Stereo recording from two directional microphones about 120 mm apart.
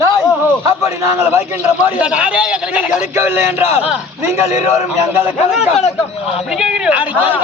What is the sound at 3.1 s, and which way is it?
A man's voice, 20° right (ahead or behind).